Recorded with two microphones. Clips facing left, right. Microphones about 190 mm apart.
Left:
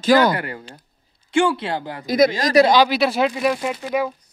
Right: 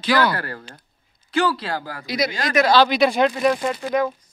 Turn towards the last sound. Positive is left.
turn(degrees=5)  # may be behind; listen again after turning